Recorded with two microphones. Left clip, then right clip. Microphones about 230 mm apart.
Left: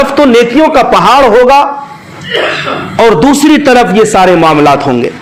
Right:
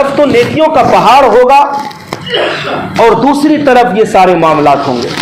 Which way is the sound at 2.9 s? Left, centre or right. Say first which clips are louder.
Left 1 dB; left.